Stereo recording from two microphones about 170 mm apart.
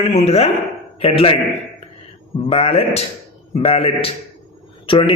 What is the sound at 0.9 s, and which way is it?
Speech, 35° left (ahead or behind).